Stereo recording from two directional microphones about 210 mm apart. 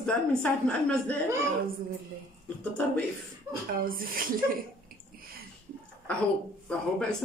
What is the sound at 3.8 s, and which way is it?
Speech, 45° right (ahead or behind).